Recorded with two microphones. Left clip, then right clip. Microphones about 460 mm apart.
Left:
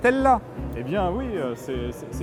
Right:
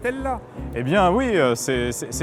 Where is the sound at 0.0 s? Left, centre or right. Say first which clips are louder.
Left 7 dB; left.